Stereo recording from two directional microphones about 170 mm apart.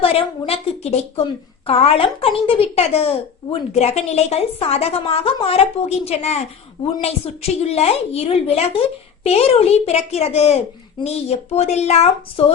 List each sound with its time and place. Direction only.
0.0 s speech: 35° left (ahead or behind)